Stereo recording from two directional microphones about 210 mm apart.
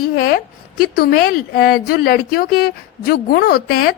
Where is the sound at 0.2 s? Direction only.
45° left (ahead or behind).